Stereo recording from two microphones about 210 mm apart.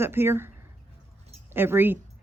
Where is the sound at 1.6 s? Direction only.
10° right (ahead or behind).